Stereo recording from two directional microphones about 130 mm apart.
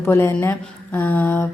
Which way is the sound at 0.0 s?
20° left (ahead or behind).